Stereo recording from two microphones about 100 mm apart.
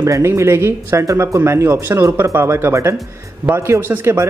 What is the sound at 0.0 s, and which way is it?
Speech, 30° right (ahead or behind).